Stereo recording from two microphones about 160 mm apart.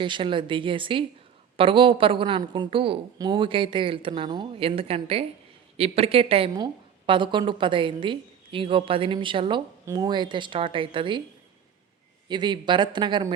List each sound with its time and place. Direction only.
0.0 s a woman's voice: 30° right (ahead or behind)
12.3 s speech: 30° right (ahead or behind)